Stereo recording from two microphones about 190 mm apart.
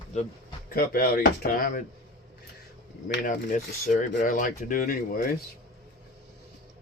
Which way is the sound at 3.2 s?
45° left (ahead or behind).